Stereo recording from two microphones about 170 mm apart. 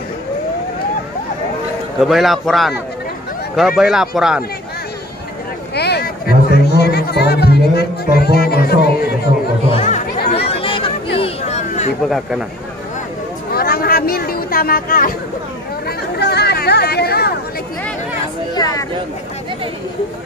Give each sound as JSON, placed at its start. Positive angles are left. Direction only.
{"t": 2.0, "sound": "a man's voice", "side_deg": 0}
{"t": 5.8, "sound": "music", "side_deg": 75}
{"t": 9.7, "sound": "chatter", "side_deg": 45}
{"t": 12.1, "sound": "a man's voice", "side_deg": -5}
{"t": 13.5, "sound": "a sound", "side_deg": 65}
{"t": 16.2, "sound": "a sound", "side_deg": 75}
{"t": 18.5, "sound": "speech", "side_deg": 20}